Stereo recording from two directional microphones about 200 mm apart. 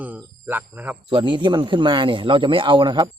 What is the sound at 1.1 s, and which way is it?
A man's voice, 25° right (ahead or behind).